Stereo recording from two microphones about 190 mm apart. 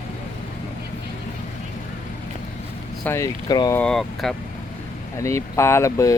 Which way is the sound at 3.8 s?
Centre (ahead or behind).